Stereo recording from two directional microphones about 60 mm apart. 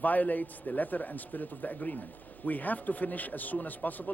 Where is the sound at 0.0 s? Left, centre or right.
Left.